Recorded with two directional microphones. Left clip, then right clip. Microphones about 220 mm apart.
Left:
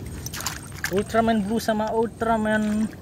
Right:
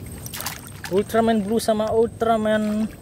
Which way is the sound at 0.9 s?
25° right (ahead or behind).